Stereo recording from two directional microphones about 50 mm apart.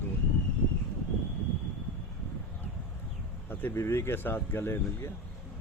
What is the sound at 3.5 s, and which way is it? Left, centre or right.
Speech, left.